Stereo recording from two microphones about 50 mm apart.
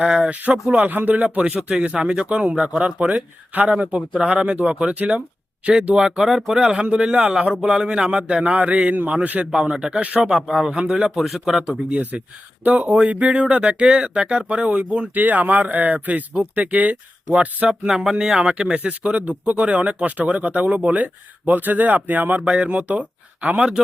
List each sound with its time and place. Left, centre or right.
0.0 s speech: right
9.5 s speech: centre
10.3 s speech: centre
10.7 s speech: right
11.1 s speech: centre
11.9 s speech: right
15.2 s speech: right
17.7 s speech: centre; by 22.4 s right
22.4 s speech: right